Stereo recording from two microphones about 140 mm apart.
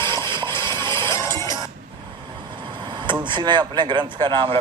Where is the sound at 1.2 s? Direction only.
20° left (ahead or behind).